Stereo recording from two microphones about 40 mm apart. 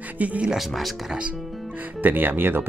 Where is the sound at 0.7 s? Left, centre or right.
Centre.